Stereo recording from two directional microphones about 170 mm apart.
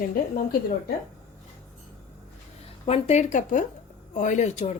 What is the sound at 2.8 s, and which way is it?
Speech, 40° left (ahead or behind).